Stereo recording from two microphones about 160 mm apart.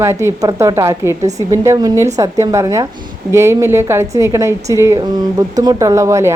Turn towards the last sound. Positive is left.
turn(degrees=-20)  # may be behind; listen again after turning